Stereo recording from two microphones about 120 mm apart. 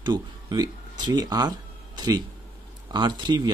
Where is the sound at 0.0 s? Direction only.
35° right (ahead or behind).